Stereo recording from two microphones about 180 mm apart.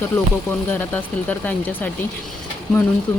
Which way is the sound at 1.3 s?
10° left (ahead or behind).